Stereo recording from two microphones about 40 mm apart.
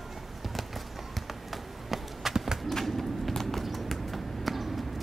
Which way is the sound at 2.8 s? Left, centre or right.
Centre.